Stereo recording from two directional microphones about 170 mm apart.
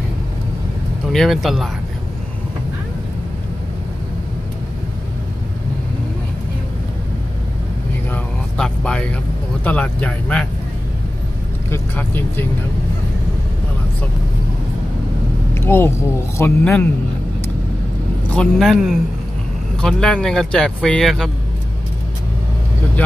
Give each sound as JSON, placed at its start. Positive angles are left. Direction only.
{"t": 1.1, "sound": "speech", "side_deg": 0}
{"t": 8.1, "sound": "vehicle", "side_deg": 5}
{"t": 9.7, "sound": "speech", "side_deg": 10}
{"t": 11.7, "sound": "speech", "side_deg": 10}
{"t": 15.5, "sound": "vehicle", "side_deg": 15}
{"t": 16.3, "sound": "speech", "side_deg": 10}
{"t": 18.3, "sound": "speech", "side_deg": 5}
{"t": 23.0, "sound": "speech", "side_deg": 10}